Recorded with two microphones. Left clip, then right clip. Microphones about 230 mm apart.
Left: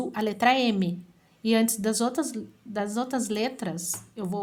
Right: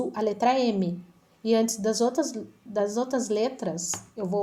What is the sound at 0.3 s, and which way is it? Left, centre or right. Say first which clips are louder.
Speech: left 2 dB; left.